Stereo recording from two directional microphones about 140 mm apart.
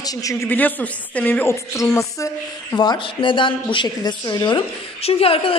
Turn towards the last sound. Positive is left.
turn(degrees=40)  # may be behind; listen again after turning